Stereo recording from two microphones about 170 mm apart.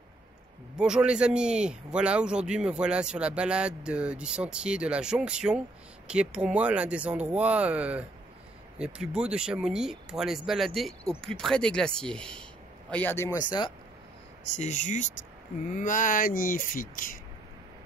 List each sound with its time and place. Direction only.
0.7 s speech: 5° right (ahead or behind); by 13.7 s 25° left (ahead or behind)
14.6 s speech: 45° left (ahead or behind)